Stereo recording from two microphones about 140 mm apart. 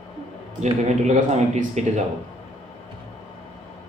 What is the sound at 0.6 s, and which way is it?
Speech, 55° right (ahead or behind).